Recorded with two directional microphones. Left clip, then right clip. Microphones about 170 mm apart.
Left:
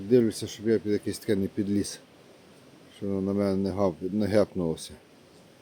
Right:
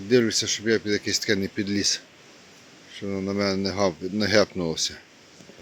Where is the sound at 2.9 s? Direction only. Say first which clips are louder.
Right 1 dB; 20° left (ahead or behind).